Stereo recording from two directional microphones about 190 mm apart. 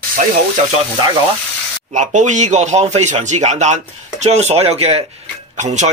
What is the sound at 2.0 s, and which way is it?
A man's voice, 40° right (ahead or behind).